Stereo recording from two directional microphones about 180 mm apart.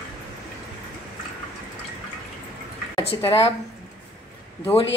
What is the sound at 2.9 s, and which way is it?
Speech, 30° left (ahead or behind).